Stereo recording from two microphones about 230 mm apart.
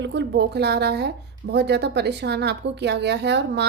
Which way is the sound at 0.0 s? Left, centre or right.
Right.